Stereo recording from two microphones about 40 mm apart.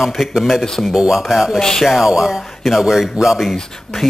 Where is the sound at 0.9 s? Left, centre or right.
Centre.